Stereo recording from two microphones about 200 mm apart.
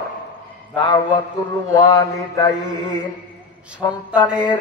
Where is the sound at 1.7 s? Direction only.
20° left (ahead or behind).